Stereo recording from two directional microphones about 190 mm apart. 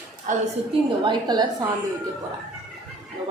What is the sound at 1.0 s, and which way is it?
Speech, 25° right (ahead or behind).